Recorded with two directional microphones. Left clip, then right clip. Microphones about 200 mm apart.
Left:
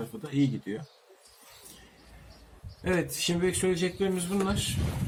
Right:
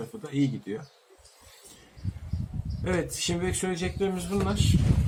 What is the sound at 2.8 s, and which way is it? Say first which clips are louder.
Speech: even; 5° left (ahead or behind).